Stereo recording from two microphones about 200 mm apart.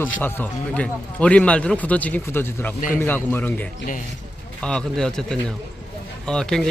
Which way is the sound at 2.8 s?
40° left (ahead or behind).